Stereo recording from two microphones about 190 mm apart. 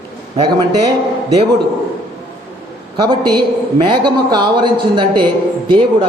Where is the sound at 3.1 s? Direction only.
25° right (ahead or behind).